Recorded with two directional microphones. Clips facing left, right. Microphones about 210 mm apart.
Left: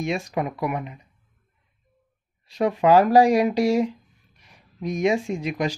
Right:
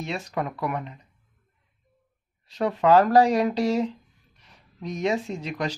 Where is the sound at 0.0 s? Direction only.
15° left (ahead or behind).